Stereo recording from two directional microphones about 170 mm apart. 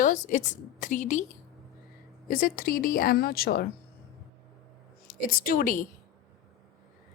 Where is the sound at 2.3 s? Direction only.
60° left (ahead or behind).